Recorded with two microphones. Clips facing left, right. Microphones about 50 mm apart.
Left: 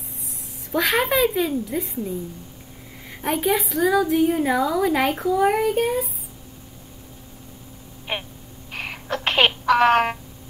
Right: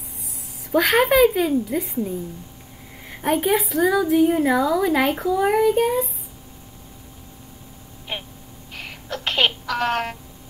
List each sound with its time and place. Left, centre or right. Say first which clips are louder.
0.7 s speech: right 3 dB; centre
1.1 s speech: right 4 dB; centre
1.5 s a woman's voice: right 3 dB; centre
3.1 s a sound: right 3 dB; centre
3.4 s a woman's voice: left 1 dB; centre
8.1 s a sound: left 3 dB; left